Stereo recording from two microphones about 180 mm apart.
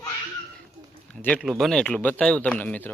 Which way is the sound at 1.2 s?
5° left (ahead or behind).